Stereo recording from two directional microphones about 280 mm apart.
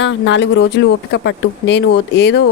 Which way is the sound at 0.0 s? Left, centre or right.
Left.